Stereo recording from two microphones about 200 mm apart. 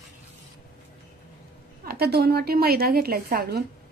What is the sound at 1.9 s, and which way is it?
A woman's voice, 50° right (ahead or behind).